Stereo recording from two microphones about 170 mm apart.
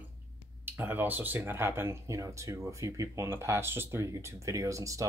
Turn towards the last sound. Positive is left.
turn(degrees=-20)  # may be behind; listen again after turning